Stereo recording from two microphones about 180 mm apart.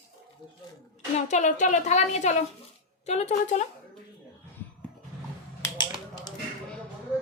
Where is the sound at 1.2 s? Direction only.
40° left (ahead or behind).